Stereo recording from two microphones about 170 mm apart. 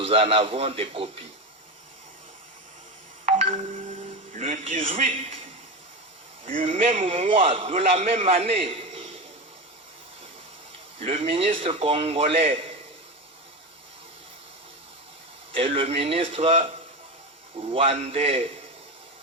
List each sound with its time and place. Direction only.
0.0 s a man's voice: 35° right (ahead or behind)
3.2 s music: 40° right (ahead or behind)
4.4 s a sound: 45° right (ahead or behind)
4.8 s a man's voice: 35° right (ahead or behind)
6.6 s a man's voice: 35° right (ahead or behind)
10.9 s a man's voice: 35° right (ahead or behind)
15.5 s a man's voice: 35° right (ahead or behind)